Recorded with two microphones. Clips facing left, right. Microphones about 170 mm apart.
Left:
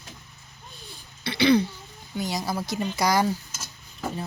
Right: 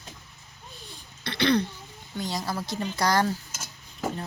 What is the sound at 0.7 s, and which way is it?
Throat clearing, centre (ahead or behind).